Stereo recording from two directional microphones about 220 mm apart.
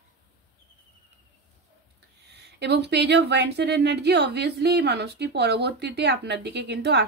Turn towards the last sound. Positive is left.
turn(degrees=-50)  # may be behind; listen again after turning